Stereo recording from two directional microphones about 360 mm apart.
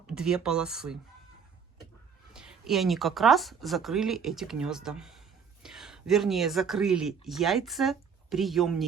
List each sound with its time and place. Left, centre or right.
0.1 s speech: centre
2.3 s speech: centre